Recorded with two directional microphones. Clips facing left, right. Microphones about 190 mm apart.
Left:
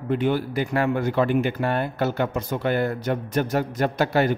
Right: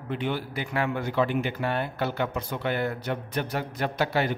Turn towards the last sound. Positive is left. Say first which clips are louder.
# left 5 dB
turn(degrees=45)  # may be behind; listen again after turning